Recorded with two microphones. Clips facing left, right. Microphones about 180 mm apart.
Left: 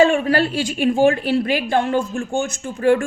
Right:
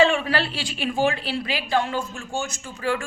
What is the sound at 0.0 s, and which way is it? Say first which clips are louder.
A woman's voice: left 5 dB; 45° left (ahead or behind).